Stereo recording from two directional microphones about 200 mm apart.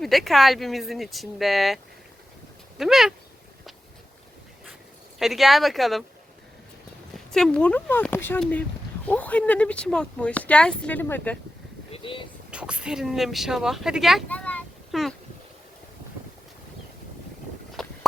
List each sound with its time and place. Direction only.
0.0 s speech: centre (ahead or behind)
5.2 s speech: centre (ahead or behind)
7.3 s speech: 5° left (ahead or behind)
11.9 s a sound: 25° left (ahead or behind)
12.5 s speech: 5° right (ahead or behind)
17.8 s a sound: centre (ahead or behind)